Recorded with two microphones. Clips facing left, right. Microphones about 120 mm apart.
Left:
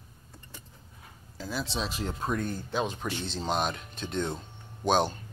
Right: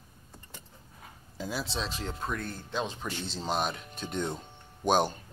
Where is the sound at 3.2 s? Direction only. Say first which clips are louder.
Left 1 dB; 5° right (ahead or behind).